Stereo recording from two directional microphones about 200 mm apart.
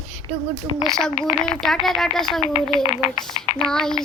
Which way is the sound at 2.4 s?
35° left (ahead or behind).